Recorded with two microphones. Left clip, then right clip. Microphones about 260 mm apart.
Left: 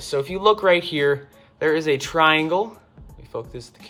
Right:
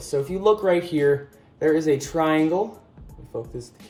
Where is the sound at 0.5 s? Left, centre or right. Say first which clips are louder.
Left 3 dB; left.